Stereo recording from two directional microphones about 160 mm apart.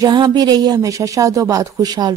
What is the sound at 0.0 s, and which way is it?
A woman's voice, 25° right (ahead or behind).